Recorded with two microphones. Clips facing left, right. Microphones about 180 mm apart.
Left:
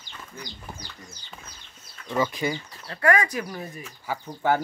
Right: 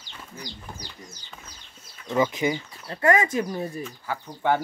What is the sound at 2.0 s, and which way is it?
Speech, 15° right (ahead or behind).